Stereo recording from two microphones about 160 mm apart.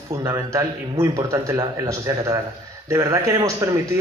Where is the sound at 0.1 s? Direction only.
20° right (ahead or behind).